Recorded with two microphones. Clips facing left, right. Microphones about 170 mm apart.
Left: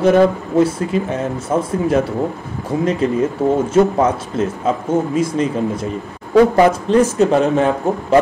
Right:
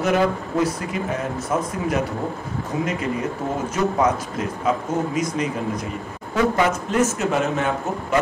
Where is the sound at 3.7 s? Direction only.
30° left (ahead or behind).